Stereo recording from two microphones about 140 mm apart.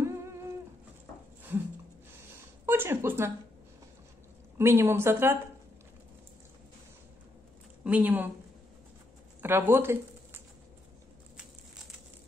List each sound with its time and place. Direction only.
0.0 s humming: 20° right (ahead or behind)
2.6 s speech: 15° right (ahead or behind)
4.6 s a woman's voice: 15° right (ahead or behind)
7.8 s a woman's voice: 10° right (ahead or behind)
9.4 s speech: 15° right (ahead or behind)